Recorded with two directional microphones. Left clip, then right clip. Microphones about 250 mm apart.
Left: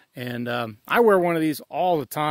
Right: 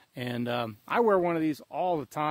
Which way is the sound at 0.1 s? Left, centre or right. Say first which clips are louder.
Left 4 dB; centre.